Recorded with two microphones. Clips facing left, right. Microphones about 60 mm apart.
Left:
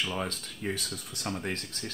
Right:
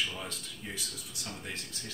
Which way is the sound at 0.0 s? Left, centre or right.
Left.